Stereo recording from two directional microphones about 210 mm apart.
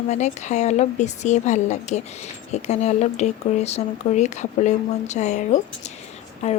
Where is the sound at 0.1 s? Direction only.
35° left (ahead or behind).